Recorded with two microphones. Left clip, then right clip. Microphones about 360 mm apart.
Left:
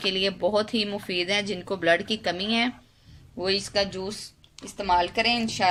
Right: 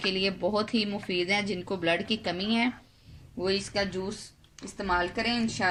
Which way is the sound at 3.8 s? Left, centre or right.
Left.